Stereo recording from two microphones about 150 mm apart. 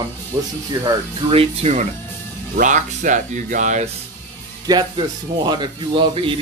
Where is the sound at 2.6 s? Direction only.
60° right (ahead or behind).